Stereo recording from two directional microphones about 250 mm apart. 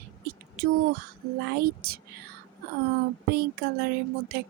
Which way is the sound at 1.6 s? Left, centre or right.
Right.